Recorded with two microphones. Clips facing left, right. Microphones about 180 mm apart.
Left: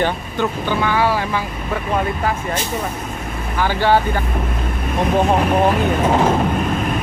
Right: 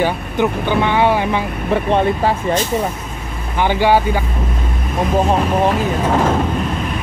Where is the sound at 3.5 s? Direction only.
15° right (ahead or behind).